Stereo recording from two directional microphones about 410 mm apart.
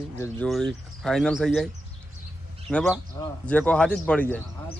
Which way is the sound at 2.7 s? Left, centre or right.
Centre.